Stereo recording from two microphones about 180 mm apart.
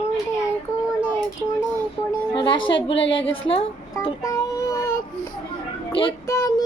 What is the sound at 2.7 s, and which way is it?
Speech, 90° left.